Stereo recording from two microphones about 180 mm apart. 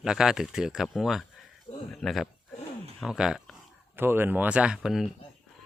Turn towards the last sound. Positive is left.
turn(degrees=0)  # may be behind; listen again after turning